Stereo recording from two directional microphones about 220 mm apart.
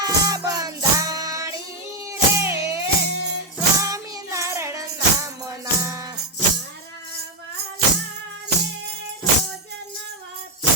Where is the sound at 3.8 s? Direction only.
15° right (ahead or behind).